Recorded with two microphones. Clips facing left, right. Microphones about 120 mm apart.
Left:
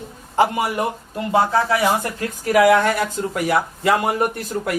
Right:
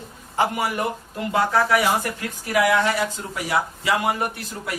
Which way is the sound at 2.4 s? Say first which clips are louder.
Left 5 dB; 50° left (ahead or behind).